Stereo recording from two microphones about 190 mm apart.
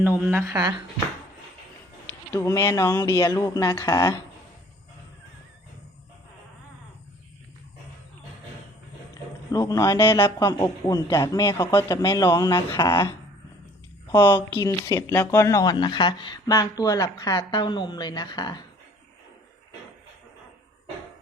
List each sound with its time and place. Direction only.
0.0 s speech: 10° right (ahead or behind)
2.0 s speech: 15° left (ahead or behind)
9.5 s a man's voice: 20° left (ahead or behind)